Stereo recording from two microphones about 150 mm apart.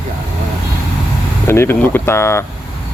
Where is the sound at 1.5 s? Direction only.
15° left (ahead or behind).